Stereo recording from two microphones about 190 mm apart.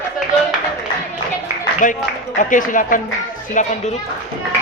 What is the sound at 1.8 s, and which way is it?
A man's voice, 40° left (ahead or behind).